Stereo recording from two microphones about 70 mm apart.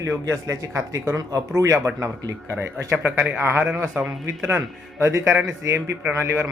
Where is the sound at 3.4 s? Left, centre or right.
Right.